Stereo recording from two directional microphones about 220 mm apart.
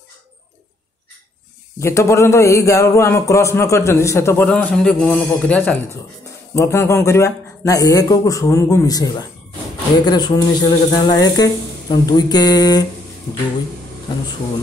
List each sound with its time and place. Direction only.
1.8 s a man's voice: 10° left (ahead or behind)